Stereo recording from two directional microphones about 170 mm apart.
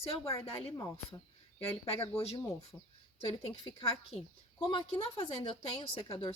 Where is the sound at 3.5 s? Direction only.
35° left (ahead or behind).